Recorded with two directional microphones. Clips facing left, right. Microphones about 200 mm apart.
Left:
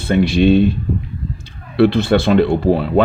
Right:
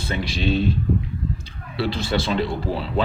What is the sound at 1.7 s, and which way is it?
Speech, 60° left (ahead or behind).